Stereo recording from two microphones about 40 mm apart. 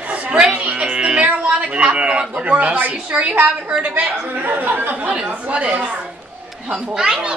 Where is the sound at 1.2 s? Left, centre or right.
Right.